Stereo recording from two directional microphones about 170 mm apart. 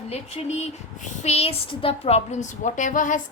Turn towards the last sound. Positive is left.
turn(degrees=50)  # may be behind; listen again after turning